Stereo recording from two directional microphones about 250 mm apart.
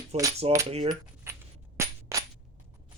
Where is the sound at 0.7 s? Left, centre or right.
Right.